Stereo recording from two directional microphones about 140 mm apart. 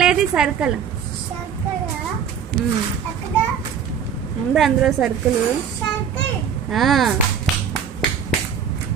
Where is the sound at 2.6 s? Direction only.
90° right.